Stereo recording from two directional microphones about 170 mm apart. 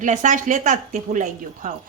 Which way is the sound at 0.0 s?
45° right (ahead or behind).